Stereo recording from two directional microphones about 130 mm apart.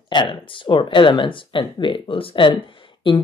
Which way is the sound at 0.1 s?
35° left (ahead or behind).